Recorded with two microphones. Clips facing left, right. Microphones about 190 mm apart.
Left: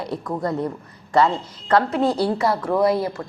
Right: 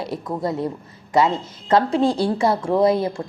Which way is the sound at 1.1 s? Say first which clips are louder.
Even; 20° right (ahead or behind).